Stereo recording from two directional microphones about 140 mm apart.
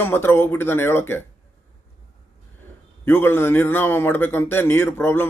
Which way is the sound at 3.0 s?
15° left (ahead or behind).